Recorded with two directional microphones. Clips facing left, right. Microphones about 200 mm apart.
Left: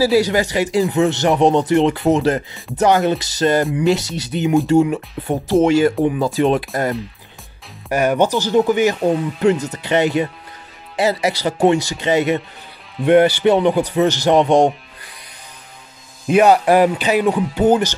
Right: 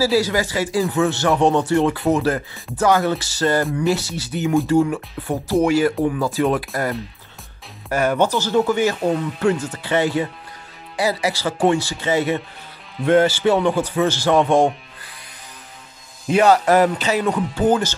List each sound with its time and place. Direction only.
0.0 s speech: 20° left (ahead or behind)
16.3 s speech: 15° left (ahead or behind)